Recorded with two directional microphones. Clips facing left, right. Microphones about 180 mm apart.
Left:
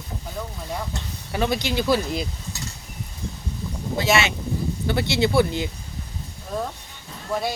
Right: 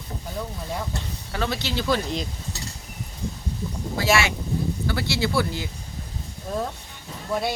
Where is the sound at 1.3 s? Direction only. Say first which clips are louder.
Left 4 dB; 15° left (ahead or behind).